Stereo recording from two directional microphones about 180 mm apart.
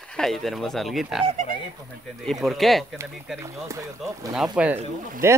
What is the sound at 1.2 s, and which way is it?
Speech, 40° right (ahead or behind).